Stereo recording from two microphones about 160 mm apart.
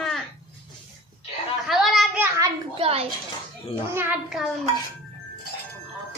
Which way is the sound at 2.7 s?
35° right (ahead or behind).